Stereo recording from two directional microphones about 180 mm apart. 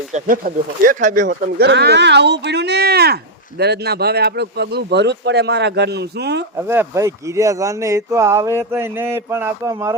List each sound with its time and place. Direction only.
0.1 s speech: 50° right (ahead or behind); by 6.4 s 70° right (ahead or behind)
6.7 s speech: 15° right (ahead or behind)